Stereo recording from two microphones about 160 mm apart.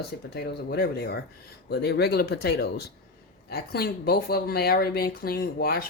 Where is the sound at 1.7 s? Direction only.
90° left.